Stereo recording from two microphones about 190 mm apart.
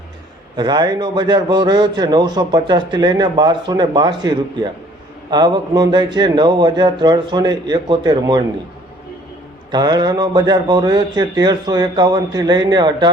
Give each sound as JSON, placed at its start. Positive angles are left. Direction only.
{"t": 0.5, "sound": "a man's voice", "side_deg": -20}
{"t": 9.7, "sound": "a man's voice", "side_deg": -20}